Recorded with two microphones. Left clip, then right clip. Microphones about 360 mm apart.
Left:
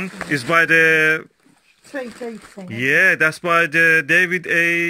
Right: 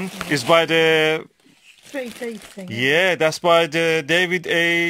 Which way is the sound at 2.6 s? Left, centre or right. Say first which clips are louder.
Left 3 dB; centre.